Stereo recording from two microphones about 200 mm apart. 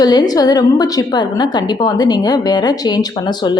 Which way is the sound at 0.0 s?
20° left (ahead or behind).